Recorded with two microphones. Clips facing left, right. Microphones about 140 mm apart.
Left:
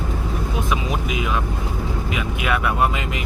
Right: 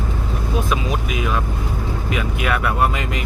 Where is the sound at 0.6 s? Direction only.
20° left (ahead or behind).